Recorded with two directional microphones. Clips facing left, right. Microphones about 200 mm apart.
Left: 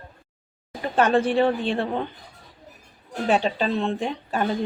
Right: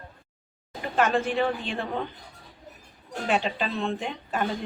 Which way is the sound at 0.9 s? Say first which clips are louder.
Left 5 dB; 30° left (ahead or behind).